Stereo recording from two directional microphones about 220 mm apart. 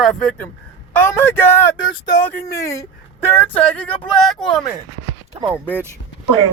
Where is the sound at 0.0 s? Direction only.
Centre (ahead or behind).